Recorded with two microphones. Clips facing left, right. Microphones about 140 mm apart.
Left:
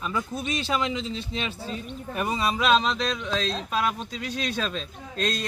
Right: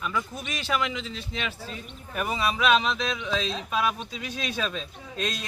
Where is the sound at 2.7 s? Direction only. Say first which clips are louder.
Left 1 dB; 5° right (ahead or behind).